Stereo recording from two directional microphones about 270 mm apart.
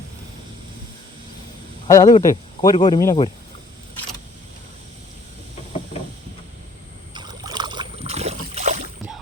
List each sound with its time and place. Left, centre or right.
1.9 s speech: centre
7.1 s rowboat: centre